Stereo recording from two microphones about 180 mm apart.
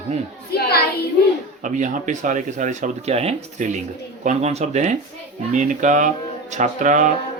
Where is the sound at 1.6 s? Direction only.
45° right (ahead or behind).